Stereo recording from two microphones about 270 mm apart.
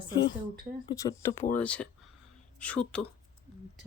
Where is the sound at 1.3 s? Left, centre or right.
Left.